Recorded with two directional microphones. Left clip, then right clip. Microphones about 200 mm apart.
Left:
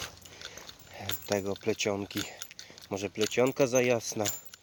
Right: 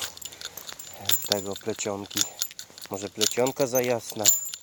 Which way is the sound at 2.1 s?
50° right (ahead or behind).